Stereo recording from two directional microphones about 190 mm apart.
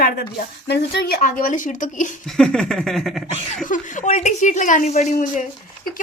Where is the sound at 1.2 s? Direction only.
45° left (ahead or behind).